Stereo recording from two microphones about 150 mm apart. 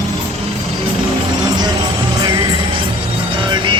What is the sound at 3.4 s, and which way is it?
Music, 30° right (ahead or behind).